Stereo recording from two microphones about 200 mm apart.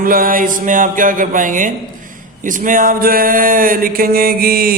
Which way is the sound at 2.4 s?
40° right (ahead or behind).